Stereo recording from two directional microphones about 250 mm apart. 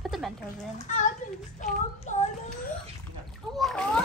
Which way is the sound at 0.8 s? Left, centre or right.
Left.